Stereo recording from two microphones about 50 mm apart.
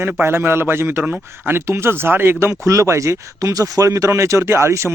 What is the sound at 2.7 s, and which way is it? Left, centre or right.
Speech, right.